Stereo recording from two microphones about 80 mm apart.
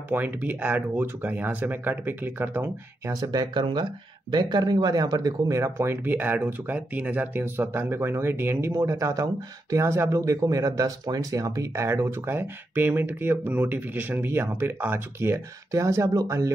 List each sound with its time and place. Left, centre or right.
0.1 s speech: right
3.3 s speech: right
15.7 s speech: right